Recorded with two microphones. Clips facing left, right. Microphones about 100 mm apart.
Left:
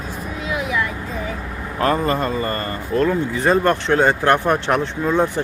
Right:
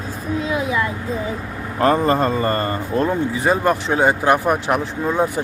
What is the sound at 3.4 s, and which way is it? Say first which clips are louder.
Speech: left 2 dB; 5° right (ahead or behind).